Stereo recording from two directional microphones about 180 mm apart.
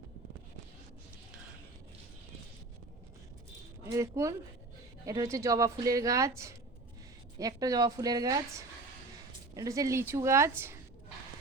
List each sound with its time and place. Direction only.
3.8 s a woman's voice: 15° right (ahead or behind)
9.6 s speech: 20° right (ahead or behind)